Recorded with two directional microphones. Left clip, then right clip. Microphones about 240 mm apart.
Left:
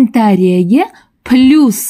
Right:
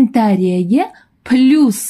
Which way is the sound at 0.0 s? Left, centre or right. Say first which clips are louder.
Left 3 dB; left.